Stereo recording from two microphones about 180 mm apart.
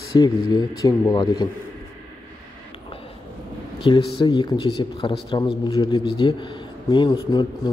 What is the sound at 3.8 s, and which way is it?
Speech, 25° left (ahead or behind).